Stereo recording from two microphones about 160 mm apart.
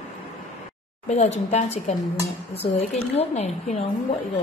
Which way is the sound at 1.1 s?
45° left (ahead or behind).